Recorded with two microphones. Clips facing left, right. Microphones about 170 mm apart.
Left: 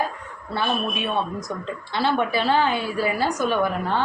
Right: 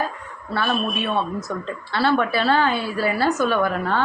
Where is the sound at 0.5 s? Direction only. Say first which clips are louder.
Right 2 dB; 20° left (ahead or behind).